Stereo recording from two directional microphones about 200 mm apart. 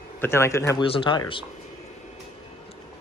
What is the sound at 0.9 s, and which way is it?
Speech, 25° left (ahead or behind).